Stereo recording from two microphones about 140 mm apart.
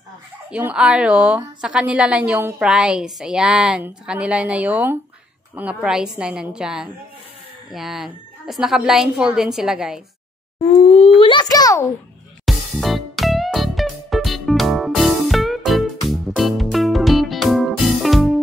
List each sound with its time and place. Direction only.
0.5 s a woman's voice: 10° right (ahead or behind)
10.6 s a sound: 50° left (ahead or behind); by 11.8 s 25° left (ahead or behind)
12.4 s music: centre (ahead or behind)